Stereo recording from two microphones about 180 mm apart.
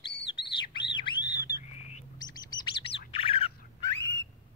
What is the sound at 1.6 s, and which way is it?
Bird, 40° left (ahead or behind).